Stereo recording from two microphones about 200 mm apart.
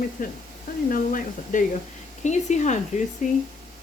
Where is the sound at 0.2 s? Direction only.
45° left (ahead or behind).